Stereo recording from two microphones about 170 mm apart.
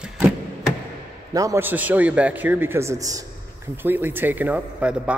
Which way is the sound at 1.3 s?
15° right (ahead or behind).